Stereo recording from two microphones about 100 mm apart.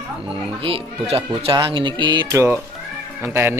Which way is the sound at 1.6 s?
55° right (ahead or behind).